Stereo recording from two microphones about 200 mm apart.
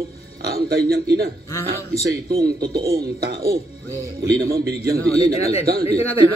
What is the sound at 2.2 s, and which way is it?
A man's voice, 50° right (ahead or behind).